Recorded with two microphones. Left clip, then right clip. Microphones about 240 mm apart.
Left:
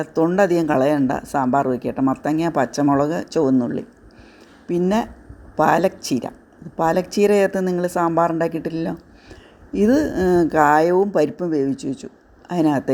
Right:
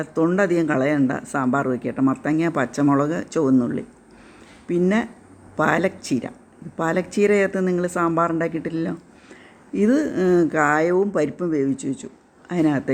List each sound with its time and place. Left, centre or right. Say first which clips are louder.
0.0 s speech: left 3 dB; centre